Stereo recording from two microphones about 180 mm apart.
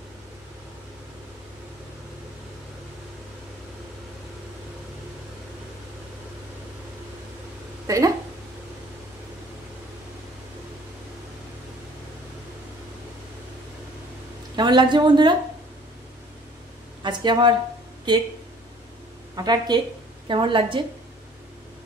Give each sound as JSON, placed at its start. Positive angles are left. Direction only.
{"t": 7.8, "sound": "a sound", "side_deg": -20}
{"t": 14.5, "sound": "a woman's voice", "side_deg": -25}
{"t": 17.0, "sound": "a woman's voice", "side_deg": -25}
{"t": 19.3, "sound": "a woman's voice", "side_deg": -25}